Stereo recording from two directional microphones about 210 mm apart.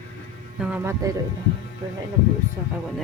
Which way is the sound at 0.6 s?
10° right (ahead or behind).